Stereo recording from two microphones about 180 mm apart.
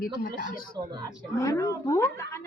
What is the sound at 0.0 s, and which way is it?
Speech, 50° left (ahead or behind).